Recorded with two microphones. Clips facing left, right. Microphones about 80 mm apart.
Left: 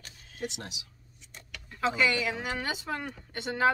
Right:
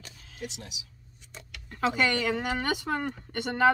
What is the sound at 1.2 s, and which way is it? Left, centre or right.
Speech, right.